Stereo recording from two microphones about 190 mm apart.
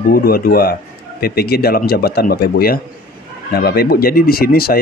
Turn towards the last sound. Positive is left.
turn(degrees=50)  # may be behind; listen again after turning